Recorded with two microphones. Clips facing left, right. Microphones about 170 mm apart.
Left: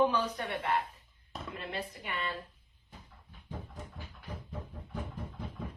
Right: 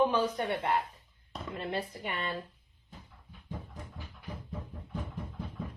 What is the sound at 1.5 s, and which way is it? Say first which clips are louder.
Speech: right 5 dB; 30° right (ahead or behind).